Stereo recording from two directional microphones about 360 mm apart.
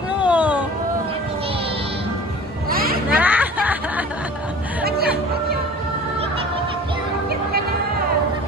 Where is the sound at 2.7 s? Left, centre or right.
Right.